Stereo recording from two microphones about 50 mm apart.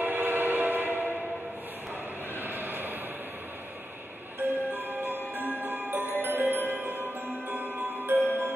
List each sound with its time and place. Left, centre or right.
0.0 s train: right
2.4 s a sound: right
4.4 s music: right
6.7 s glockenspiel: right